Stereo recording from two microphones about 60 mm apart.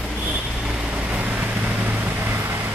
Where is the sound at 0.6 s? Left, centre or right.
Centre.